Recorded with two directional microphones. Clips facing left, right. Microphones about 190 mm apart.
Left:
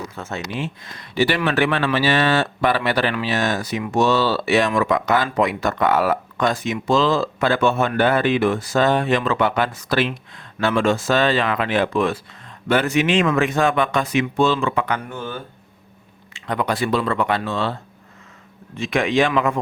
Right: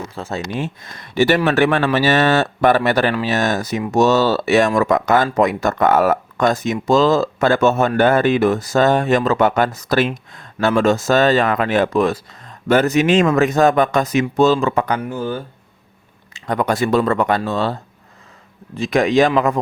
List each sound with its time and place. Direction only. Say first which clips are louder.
0.2 s speech: right 4 dB; 35° right (ahead or behind)
18.8 s speech: right 4 dB; 40° right (ahead or behind)